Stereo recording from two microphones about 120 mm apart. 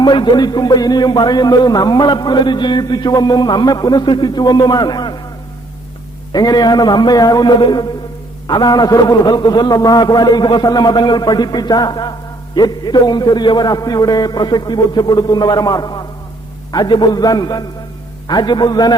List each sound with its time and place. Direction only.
0.0 s speech: 40° left (ahead or behind)
6.3 s speech: 35° left (ahead or behind)